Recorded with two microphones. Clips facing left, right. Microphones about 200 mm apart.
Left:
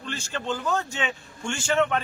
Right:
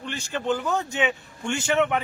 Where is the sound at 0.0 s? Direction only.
15° right (ahead or behind).